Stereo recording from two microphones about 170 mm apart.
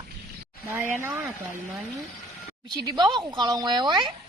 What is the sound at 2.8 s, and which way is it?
A woman's voice, 25° right (ahead or behind).